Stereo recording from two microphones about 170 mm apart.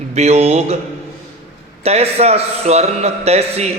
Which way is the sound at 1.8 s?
35° right (ahead or behind).